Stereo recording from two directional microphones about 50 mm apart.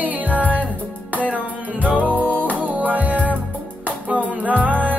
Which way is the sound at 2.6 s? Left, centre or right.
Right.